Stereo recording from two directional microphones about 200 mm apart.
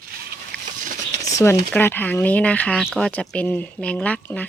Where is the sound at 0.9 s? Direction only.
35° right (ahead or behind).